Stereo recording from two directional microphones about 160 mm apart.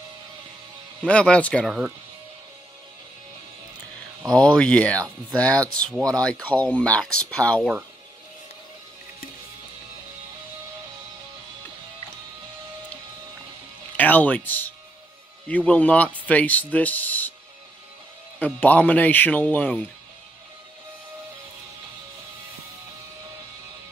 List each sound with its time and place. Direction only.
1.0 s speech: 5° left (ahead or behind)
4.3 s speech: 25° right (ahead or behind)
4.6 s speech: 5° left (ahead or behind)
13.9 s speech: 10° left (ahead or behind)
18.4 s speech: 10° left (ahead or behind)